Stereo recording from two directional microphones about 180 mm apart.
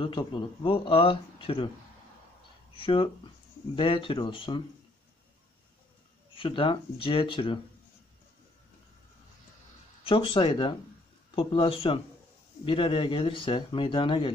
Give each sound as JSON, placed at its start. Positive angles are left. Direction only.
{"t": 0.0, "sound": "speech", "side_deg": 30}
{"t": 2.8, "sound": "speech", "side_deg": 25}
{"t": 6.3, "sound": "speech", "side_deg": 30}
{"t": 10.0, "sound": "speech", "side_deg": 30}